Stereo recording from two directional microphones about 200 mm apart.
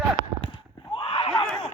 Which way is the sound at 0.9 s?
25° left (ahead or behind).